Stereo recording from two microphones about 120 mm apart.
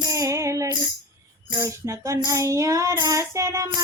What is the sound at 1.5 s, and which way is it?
Child singing, 25° right (ahead or behind).